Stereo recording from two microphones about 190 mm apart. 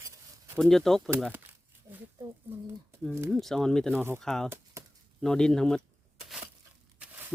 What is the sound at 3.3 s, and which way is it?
Speech, centre (ahead or behind).